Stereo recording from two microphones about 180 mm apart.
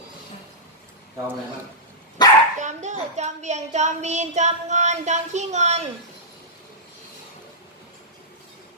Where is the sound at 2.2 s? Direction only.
20° left (ahead or behind).